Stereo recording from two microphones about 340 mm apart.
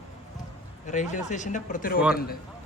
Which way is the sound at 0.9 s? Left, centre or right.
Left.